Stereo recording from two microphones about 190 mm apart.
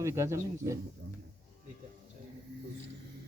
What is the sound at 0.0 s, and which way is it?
Speech, 15° right (ahead or behind).